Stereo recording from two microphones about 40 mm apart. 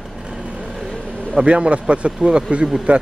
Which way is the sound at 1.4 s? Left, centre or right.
Right.